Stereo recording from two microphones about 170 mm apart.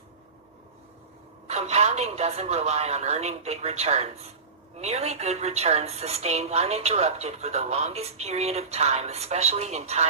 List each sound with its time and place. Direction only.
1.5 s a woman's voice: 40° right (ahead or behind)